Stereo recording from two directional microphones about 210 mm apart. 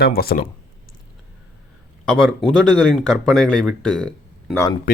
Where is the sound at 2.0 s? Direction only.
5° left (ahead or behind).